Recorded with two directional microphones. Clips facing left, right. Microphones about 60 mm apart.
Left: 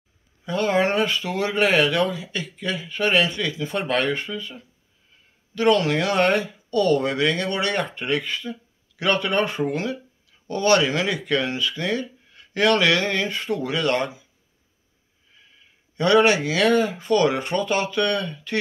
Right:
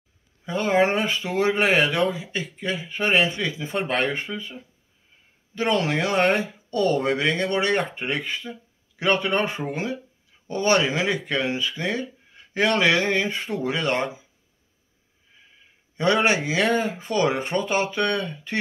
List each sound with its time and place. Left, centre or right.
0.5 s speech: centre
16.0 s speech: centre